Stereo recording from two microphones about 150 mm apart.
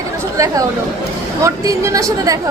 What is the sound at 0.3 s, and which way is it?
A woman's voice, 20° right (ahead or behind).